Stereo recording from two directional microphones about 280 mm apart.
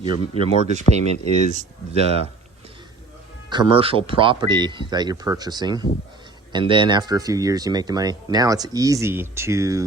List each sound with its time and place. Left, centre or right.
0.0 s speech: centre
3.5 s speech: centre